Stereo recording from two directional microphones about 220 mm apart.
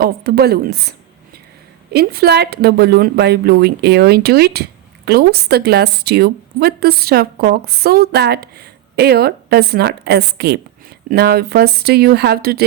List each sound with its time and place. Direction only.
0.0 s a woman's voice: 45° right (ahead or behind)